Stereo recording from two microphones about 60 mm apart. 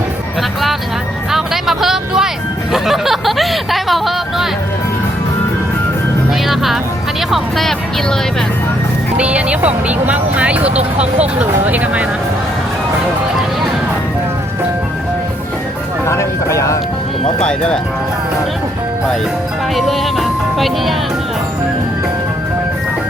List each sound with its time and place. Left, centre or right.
1.3 s vehicle: centre
2.7 s a sound: centre
6.5 s music: centre
7.3 s speech: centre
9.1 s speech: right
16.0 s speech: left
19.7 s speech: centre